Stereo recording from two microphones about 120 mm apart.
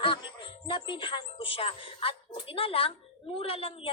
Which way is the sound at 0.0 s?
45° left (ahead or behind).